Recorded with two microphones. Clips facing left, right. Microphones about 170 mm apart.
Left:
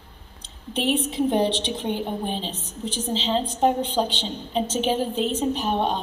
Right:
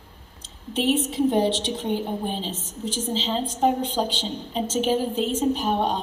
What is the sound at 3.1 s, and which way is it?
A woman's voice, 5° right (ahead or behind).